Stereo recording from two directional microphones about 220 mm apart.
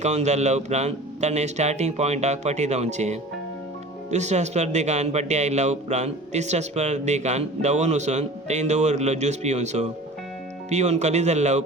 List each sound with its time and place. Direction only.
0.0 s a man's voice: 30° right (ahead or behind)